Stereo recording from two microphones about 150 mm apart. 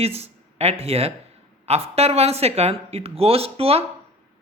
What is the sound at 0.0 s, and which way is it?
Speech, 45° right (ahead or behind).